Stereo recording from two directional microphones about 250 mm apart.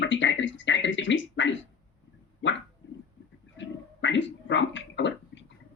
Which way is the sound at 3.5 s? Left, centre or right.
Left.